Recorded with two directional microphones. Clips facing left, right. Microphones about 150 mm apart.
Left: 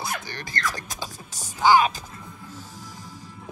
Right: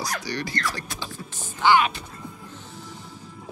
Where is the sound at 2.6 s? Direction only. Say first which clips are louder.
Right 1 dB; 40° left (ahead or behind).